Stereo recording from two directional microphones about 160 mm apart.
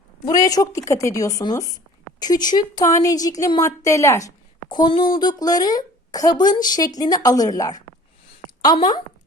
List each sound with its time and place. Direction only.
0.3 s speech: 20° left (ahead or behind)
4.7 s speech: 30° left (ahead or behind)